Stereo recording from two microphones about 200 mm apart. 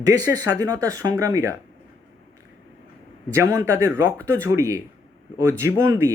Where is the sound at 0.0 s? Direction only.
15° right (ahead or behind).